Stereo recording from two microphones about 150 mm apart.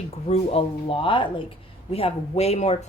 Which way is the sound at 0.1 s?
45° left (ahead or behind).